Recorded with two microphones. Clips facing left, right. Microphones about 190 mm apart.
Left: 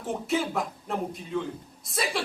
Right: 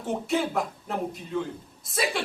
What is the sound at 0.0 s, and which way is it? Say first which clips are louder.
Speech: right 1 dB; centre (ahead or behind).